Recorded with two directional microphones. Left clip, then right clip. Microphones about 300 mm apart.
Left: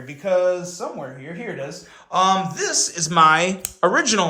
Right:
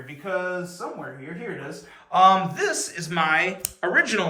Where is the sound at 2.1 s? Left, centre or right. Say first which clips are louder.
Right 1 dB; centre.